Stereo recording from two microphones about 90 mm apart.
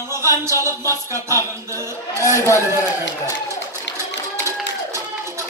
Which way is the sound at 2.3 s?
35° left (ahead or behind).